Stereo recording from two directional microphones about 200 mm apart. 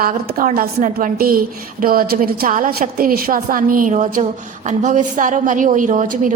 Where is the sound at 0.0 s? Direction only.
45° right (ahead or behind).